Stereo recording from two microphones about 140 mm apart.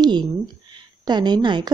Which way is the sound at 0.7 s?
30° right (ahead or behind).